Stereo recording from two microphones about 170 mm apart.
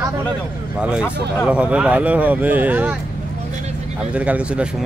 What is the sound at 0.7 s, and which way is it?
Speech, 5° right (ahead or behind).